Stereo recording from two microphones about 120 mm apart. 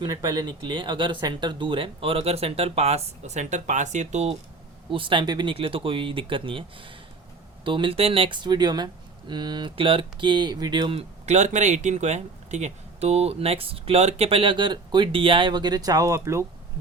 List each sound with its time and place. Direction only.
0.0 s speech: 30° right (ahead or behind); by 4.4 s 70° right (ahead or behind)
4.9 s speech: 45° right (ahead or behind)
10.9 s speech: 75° right (ahead or behind); by 16.5 s 25° right (ahead or behind)